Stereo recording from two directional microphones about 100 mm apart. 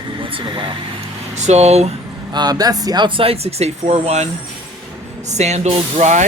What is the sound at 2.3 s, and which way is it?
Speech, 40° right (ahead or behind).